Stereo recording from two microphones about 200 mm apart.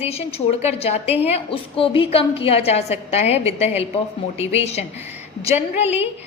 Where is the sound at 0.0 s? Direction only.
30° left (ahead or behind).